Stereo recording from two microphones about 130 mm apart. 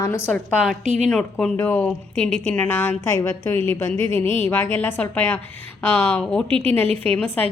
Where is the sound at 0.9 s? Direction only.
60° right (ahead or behind).